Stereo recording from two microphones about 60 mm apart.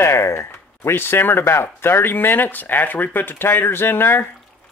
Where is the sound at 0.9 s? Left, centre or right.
Left.